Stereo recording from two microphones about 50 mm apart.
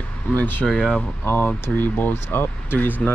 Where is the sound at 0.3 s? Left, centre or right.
Left.